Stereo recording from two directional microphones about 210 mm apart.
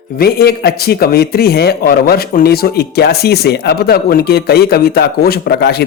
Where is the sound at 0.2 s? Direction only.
45° left (ahead or behind).